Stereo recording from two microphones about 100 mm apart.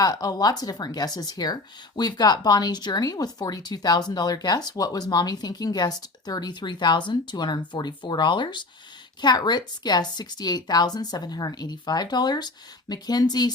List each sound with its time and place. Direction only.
0.0 s a woman's voice: 40° left (ahead or behind)